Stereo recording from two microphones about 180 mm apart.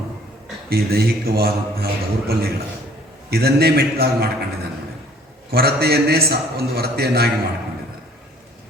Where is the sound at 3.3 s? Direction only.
60° right (ahead or behind).